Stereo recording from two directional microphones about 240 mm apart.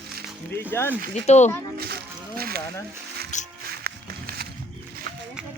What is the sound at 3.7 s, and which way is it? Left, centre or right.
Music, right.